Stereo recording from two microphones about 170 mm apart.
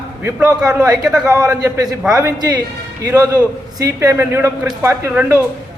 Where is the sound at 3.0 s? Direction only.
20° right (ahead or behind).